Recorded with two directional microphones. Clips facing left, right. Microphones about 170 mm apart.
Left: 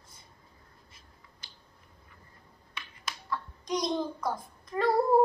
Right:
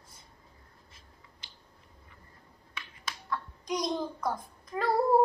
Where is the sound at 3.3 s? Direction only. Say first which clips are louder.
Left 1 dB; centre (ahead or behind).